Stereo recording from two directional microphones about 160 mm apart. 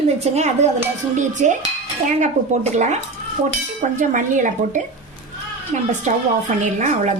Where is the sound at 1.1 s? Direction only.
50° right (ahead or behind).